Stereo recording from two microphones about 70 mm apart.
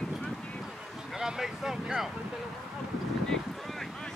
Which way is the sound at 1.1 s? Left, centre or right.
Centre.